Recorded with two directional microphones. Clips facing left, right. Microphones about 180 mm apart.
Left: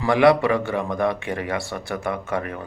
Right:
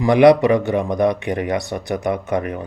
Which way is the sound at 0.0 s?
20° right (ahead or behind).